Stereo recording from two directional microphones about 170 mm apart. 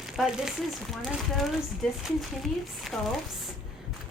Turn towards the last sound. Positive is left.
turn(degrees=0)  # may be behind; listen again after turning